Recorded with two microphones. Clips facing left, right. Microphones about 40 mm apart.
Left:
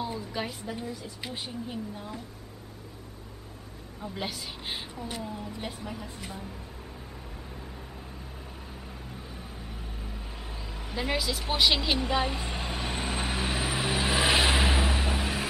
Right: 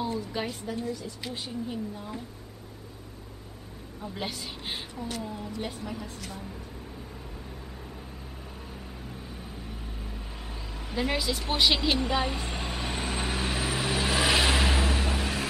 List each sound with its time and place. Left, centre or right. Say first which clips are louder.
0.3 s a woman's voice: right 1 dB; centre
0.7 s speech: right 3 dB; centre
4.0 s a woman's voice: even; centre
6.0 s a woman's voice: even; centre
9.7 s vehicle: right 1 dB; centre